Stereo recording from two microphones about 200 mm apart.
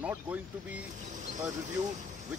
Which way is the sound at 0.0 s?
5° right (ahead or behind).